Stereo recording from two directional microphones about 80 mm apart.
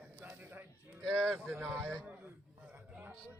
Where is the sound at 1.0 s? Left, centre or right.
Centre.